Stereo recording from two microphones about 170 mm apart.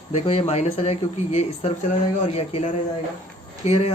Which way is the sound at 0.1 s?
35° left (ahead or behind).